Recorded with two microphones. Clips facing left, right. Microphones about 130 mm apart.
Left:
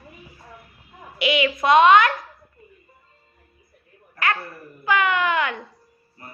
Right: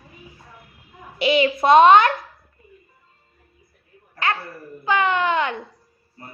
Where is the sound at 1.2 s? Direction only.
30° right (ahead or behind).